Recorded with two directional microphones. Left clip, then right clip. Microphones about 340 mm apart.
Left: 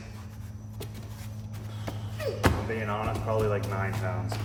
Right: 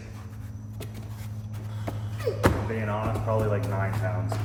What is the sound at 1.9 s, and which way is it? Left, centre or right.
A man's voice, centre.